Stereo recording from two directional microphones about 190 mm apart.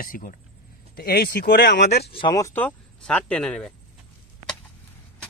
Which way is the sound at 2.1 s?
20° left (ahead or behind).